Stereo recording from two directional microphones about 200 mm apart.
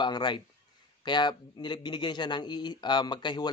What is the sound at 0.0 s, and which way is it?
Speech, 20° left (ahead or behind).